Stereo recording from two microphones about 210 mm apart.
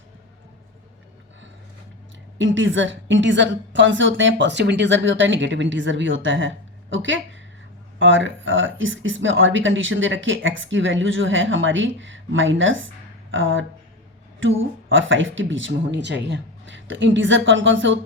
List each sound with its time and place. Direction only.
2.4 s speech: 65° right (ahead or behind)
14.8 s speech: 65° right (ahead or behind)